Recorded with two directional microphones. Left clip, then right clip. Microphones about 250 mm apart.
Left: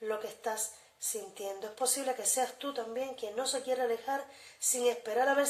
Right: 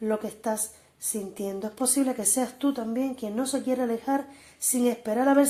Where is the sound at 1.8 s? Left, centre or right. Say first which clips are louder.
Right 6 dB; right.